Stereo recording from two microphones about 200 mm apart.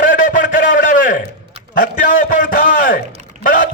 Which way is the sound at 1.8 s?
40° left (ahead or behind).